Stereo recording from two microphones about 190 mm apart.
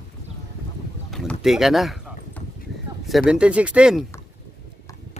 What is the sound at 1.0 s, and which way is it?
Boat, centre (ahead or behind).